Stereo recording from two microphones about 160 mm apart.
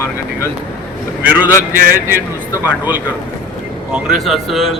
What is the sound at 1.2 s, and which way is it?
A man's voice, 10° right (ahead or behind).